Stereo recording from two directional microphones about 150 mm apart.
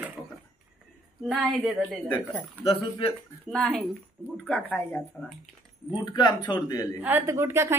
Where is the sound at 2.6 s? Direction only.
40° left (ahead or behind).